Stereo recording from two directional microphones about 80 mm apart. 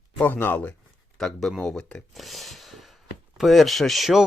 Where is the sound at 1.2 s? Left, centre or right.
Centre.